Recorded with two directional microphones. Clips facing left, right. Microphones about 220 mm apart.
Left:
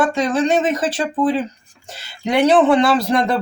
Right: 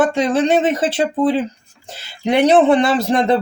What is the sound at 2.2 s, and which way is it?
Speech, 25° right (ahead or behind).